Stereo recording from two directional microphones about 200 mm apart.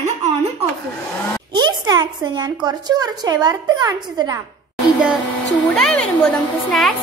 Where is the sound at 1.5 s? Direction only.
20° right (ahead or behind).